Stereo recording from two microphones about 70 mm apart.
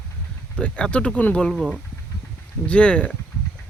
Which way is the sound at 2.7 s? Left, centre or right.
Centre.